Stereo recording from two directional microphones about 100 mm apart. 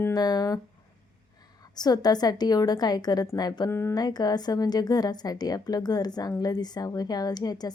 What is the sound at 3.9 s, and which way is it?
A woman's voice, 40° left (ahead or behind).